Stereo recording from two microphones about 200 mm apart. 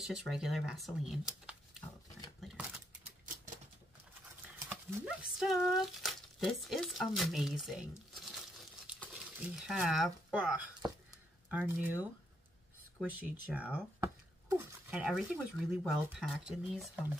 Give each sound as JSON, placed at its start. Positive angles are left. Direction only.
{"t": 0.0, "sound": "speech", "side_deg": 0}
{"t": 2.4, "sound": "a sound", "side_deg": 0}
{"t": 4.6, "sound": "speech", "side_deg": 0}
{"t": 13.1, "sound": "speech", "side_deg": -5}